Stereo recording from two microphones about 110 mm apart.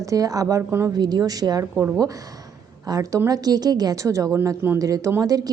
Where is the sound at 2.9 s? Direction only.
30° right (ahead or behind).